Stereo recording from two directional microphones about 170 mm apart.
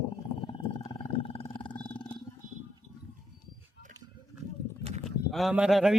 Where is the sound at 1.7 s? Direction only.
10° left (ahead or behind).